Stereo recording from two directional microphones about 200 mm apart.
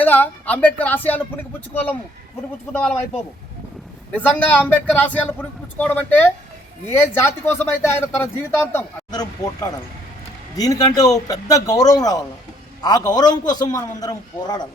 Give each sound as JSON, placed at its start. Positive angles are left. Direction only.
{"t": 0.0, "sound": "a man's voice", "side_deg": 10}
{"t": 4.1, "sound": "a man's voice", "side_deg": 5}